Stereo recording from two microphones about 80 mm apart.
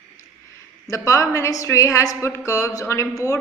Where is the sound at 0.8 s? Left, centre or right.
Left.